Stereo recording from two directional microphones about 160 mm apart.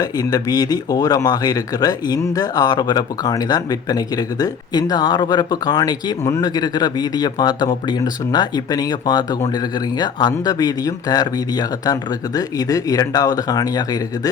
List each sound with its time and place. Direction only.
0.0 s speech: 25° left (ahead or behind)